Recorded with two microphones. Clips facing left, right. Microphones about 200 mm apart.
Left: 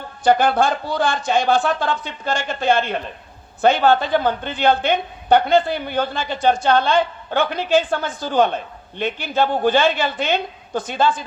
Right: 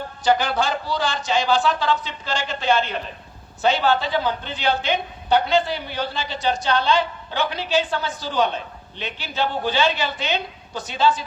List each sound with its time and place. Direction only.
0.3 s a woman's voice: 55° left (ahead or behind)